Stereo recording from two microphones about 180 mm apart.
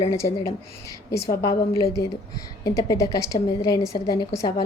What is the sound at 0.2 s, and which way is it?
A woman's voice, 15° left (ahead or behind).